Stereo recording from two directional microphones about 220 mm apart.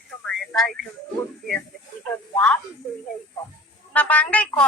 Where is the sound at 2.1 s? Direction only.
5° left (ahead or behind).